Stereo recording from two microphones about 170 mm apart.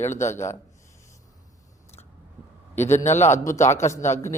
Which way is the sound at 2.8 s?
45° left (ahead or behind).